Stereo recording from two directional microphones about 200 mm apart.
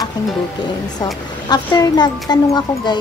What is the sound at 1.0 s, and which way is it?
A woman's voice, 20° left (ahead or behind).